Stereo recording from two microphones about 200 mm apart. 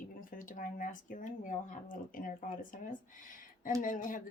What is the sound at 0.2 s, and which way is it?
Speech, 45° left (ahead or behind).